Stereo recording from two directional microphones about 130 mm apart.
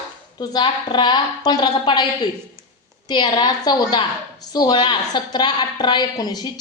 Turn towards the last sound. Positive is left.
turn(degrees=30)  # may be behind; listen again after turning